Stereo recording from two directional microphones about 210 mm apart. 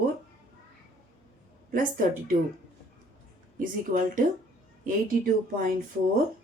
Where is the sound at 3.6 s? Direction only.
40° right (ahead or behind).